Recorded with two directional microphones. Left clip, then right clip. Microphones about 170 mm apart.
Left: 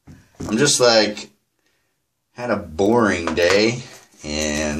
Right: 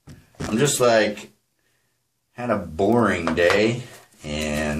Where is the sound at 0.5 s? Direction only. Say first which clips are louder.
Left 3 dB; 40° left (ahead or behind).